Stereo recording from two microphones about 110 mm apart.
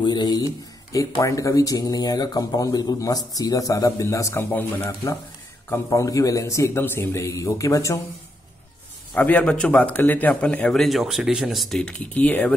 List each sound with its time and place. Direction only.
0.0 s speech: 40° left (ahead or behind); by 4.7 s 20° left (ahead or behind)
5.7 s a man's voice: 30° left (ahead or behind)
9.1 s speech: 15° left (ahead or behind)